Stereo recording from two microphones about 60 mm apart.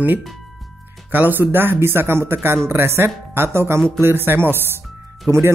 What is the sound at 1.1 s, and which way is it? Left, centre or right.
Speech, right.